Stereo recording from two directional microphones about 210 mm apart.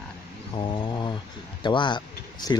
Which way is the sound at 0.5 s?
25° left (ahead or behind).